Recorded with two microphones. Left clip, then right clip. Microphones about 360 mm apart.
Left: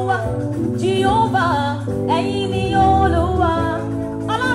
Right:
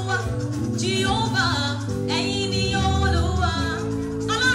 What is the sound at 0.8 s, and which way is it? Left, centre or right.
Music, centre.